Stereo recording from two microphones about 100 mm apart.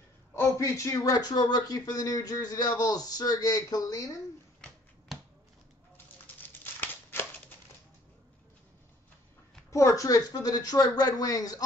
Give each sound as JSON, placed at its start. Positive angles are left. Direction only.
{"t": 0.6, "sound": "speech", "side_deg": 35}
{"t": 4.6, "sound": "finger snapping", "side_deg": 0}
{"t": 6.4, "sound": "crumpling", "side_deg": 20}
{"t": 9.7, "sound": "speech", "side_deg": 30}